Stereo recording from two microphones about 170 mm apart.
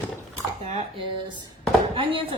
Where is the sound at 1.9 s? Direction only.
30° right (ahead or behind).